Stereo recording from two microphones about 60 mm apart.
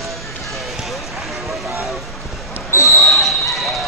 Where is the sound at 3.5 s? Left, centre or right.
Centre.